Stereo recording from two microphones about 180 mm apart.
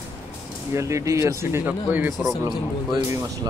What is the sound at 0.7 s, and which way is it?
Speech, 15° right (ahead or behind).